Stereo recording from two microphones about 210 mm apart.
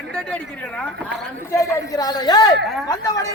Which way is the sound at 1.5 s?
15° left (ahead or behind).